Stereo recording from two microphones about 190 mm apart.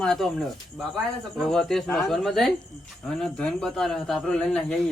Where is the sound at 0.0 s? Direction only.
5° left (ahead or behind).